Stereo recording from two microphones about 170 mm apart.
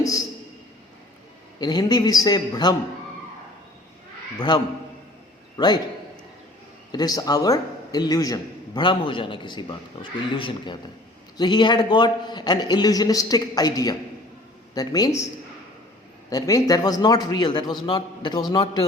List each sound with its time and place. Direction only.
1.5 s a man's voice: 25° left (ahead or behind)
4.4 s a man's voice: 25° left (ahead or behind)
6.9 s a man's voice: 20° left (ahead or behind)
16.3 s a man's voice: 20° left (ahead or behind)